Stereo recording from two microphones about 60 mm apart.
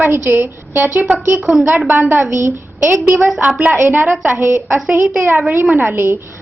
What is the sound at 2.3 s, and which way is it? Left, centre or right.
Speech, right.